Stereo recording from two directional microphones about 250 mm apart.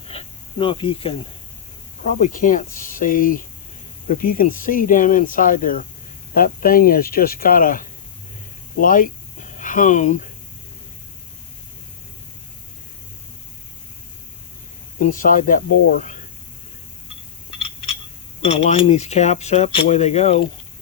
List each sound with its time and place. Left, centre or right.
0.1 s snake: left
2.0 s speech: left
14.9 s speech: left
18.4 s speech: left